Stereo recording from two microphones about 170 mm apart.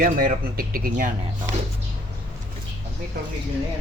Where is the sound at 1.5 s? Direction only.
90° right.